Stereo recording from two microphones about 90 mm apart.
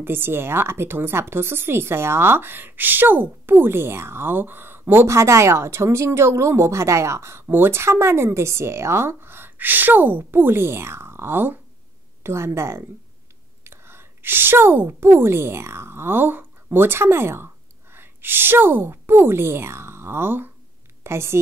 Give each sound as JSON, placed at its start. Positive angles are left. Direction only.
{"t": 0.0, "sound": "a woman's voice", "side_deg": -25}